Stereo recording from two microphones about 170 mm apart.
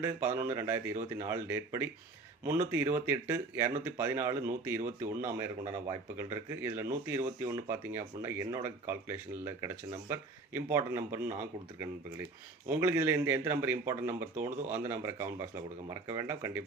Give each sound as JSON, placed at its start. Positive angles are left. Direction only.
{"t": 0.0, "sound": "speech", "side_deg": -15}